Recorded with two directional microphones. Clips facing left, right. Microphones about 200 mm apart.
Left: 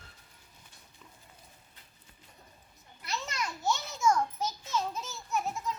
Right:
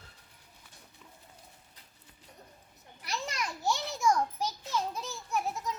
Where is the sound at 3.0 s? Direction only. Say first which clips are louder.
Even; 15° right (ahead or behind).